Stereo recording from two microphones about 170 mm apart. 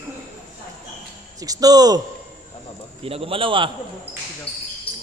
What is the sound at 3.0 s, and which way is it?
Speech, 35° right (ahead or behind).